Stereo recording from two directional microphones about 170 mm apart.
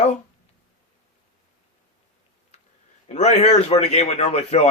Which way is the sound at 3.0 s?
40° left (ahead or behind).